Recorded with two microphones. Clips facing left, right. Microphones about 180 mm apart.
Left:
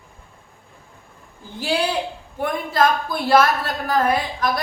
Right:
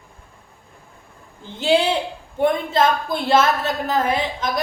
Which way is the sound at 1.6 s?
25° right (ahead or behind).